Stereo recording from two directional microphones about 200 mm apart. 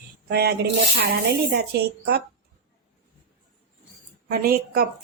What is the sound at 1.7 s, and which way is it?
Speech, 55° right (ahead or behind).